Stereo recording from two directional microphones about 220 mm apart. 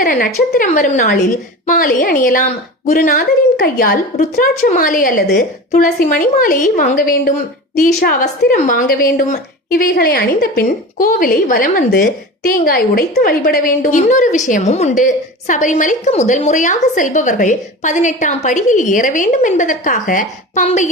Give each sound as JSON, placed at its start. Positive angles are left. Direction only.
{"t": 0.0, "sound": "a woman's voice", "side_deg": 40}